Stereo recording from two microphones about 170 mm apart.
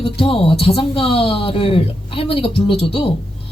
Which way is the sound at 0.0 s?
30° left (ahead or behind).